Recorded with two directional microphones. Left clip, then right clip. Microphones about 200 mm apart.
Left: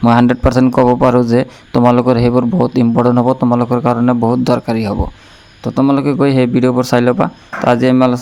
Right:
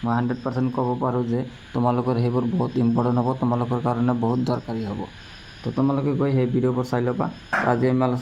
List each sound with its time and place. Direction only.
0.0 s a man's voice: 60° left (ahead or behind)